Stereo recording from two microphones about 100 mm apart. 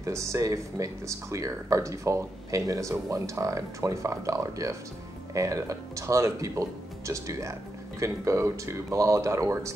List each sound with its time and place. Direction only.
0.0 s speech: 30° right (ahead or behind)